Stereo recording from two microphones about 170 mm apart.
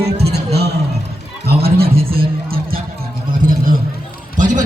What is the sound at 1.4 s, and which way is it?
A man's voice, 65° right (ahead or behind).